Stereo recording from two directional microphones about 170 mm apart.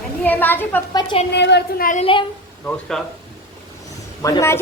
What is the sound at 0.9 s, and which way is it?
Speech, 25° left (ahead or behind).